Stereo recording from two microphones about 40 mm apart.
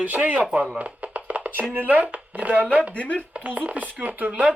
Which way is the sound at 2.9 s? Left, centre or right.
Left.